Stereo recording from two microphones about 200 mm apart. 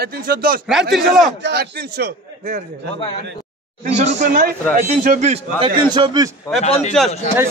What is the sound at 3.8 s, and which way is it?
Speech, 35° right (ahead or behind).